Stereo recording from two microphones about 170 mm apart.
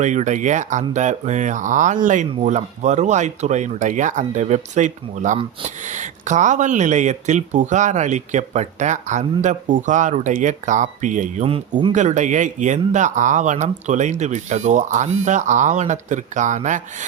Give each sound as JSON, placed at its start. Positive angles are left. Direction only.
{"t": 0.0, "sound": "speech", "side_deg": -45}